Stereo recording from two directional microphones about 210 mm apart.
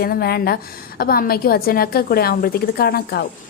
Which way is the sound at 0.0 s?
45° left (ahead or behind).